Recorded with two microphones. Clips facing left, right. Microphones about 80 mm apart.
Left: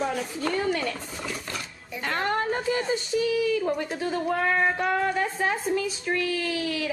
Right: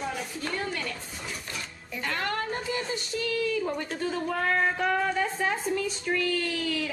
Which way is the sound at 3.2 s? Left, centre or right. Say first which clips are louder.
Left 4 dB; centre.